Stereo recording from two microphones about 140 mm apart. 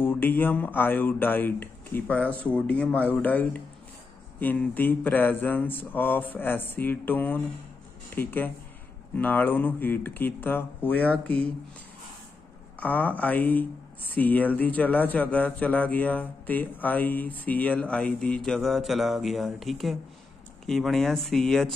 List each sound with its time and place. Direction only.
0.0 s speech: 15° left (ahead or behind)
12.8 s speech: 10° left (ahead or behind)